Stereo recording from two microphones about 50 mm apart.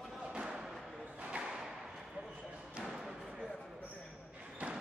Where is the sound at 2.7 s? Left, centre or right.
Centre.